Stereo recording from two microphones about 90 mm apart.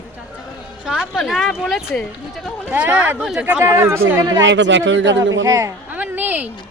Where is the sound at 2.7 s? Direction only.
20° right (ahead or behind).